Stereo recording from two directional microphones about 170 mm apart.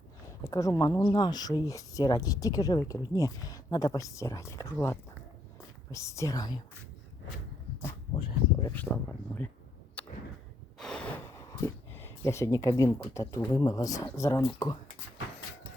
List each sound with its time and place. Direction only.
0.3 s speech: 20° left (ahead or behind)
8.1 s a sound: 30° left (ahead or behind)
8.7 s speech: 10° left (ahead or behind)
10.0 s a sound: 10° left (ahead or behind)
10.8 s gasp: 5° left (ahead or behind)
11.3 s speech: 15° left (ahead or behind)